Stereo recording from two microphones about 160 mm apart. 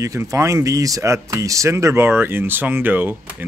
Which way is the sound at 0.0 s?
20° right (ahead or behind).